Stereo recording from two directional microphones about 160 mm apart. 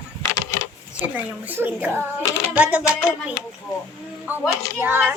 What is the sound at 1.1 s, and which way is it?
A child's voice, 10° right (ahead or behind).